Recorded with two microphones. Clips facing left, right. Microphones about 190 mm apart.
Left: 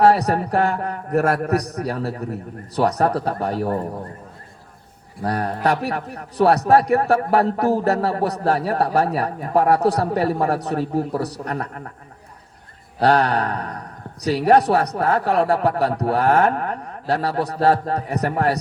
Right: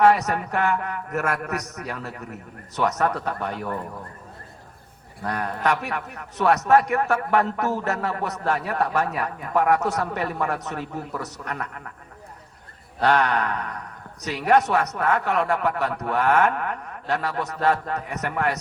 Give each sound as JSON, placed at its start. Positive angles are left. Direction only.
{"t": 0.0, "sound": "a man's voice", "side_deg": 35}
{"t": 5.2, "sound": "a man's voice", "side_deg": 35}
{"t": 13.0, "sound": "a man's voice", "side_deg": 35}